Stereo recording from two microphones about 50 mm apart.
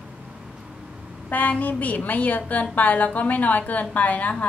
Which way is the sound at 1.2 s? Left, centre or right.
Left.